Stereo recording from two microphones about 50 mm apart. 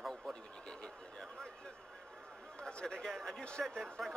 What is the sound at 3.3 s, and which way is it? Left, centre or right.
Speech, centre.